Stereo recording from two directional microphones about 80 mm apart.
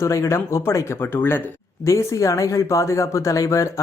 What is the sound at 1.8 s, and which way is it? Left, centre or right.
Speech, left.